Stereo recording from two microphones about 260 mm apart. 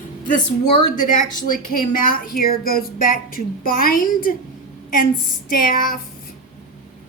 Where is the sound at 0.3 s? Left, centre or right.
Left.